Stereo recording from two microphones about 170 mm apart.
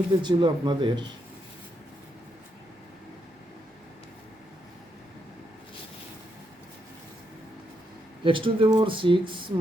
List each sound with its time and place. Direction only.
0.2 s speech: 25° right (ahead or behind)
8.2 s speech: 30° right (ahead or behind)